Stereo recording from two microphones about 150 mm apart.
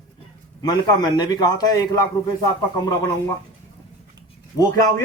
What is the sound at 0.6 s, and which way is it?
A man's voice, 30° left (ahead or behind).